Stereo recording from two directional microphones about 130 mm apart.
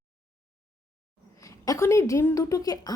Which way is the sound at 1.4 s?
25° left (ahead or behind).